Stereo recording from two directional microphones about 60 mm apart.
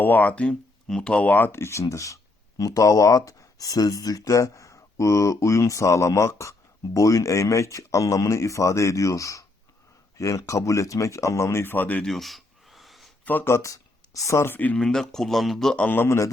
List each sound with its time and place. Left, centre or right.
0.0 s speech: left
1.5 s speech: left
1.8 s speech: left
2.6 s speech: left
11.7 s speech: left
12.0 s a sound: centre
13.3 s speech: left
13.6 s a sound: left
14.3 s speech: left
14.8 s speech: centre
16.0 s speech: left